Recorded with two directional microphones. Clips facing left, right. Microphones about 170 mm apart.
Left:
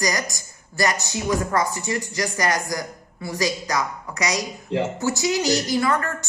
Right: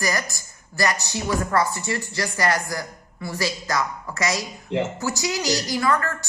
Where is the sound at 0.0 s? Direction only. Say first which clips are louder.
Left 1 dB; 20° left (ahead or behind).